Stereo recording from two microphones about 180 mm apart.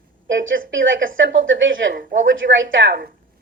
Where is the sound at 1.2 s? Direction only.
90° right.